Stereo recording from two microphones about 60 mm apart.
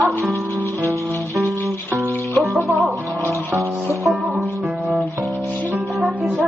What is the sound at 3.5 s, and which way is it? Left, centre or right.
Music, right.